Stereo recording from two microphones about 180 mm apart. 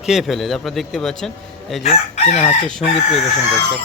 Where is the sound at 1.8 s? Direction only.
35° left (ahead or behind).